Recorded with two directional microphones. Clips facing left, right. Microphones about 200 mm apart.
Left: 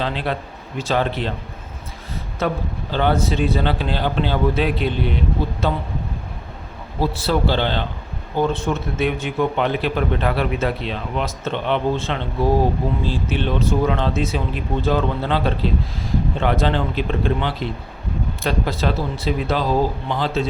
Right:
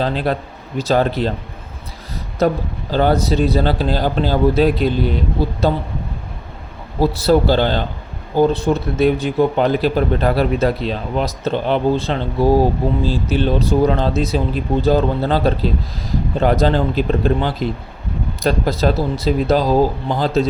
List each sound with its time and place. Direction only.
0.0 s a man's voice: 40° right (ahead or behind)
2.4 s a man's voice: 40° right (ahead or behind)
7.0 s a man's voice: 40° right (ahead or behind)